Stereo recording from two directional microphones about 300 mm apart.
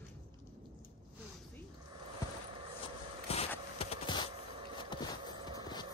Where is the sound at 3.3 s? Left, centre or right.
Centre.